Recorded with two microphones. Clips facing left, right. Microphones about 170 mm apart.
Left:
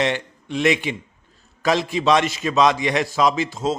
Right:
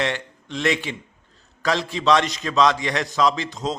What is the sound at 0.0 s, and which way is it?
A man's voice, 15° left (ahead or behind).